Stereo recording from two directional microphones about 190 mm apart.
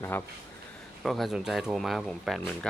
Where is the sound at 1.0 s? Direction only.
Centre (ahead or behind).